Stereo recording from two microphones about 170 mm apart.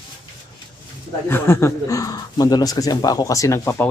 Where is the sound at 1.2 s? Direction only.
15° left (ahead or behind).